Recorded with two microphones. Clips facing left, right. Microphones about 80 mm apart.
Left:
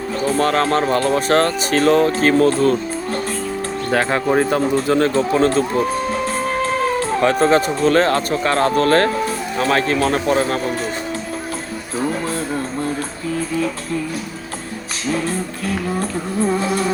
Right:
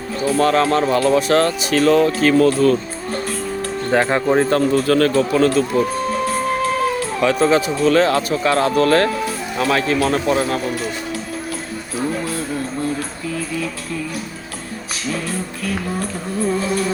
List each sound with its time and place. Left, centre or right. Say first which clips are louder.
0.3 s speech: right 2 dB; left
3.9 s speech: right 1 dB; centre
4.6 s a man's voice: right 1 dB; left
15.1 s speech: left 4 dB; left